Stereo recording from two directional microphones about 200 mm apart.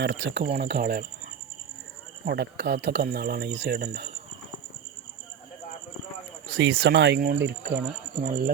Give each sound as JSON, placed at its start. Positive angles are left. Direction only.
{"t": 0.0, "sound": "speech", "side_deg": -55}
{"t": 2.3, "sound": "speech", "side_deg": -55}
{"t": 6.5, "sound": "speech", "side_deg": -60}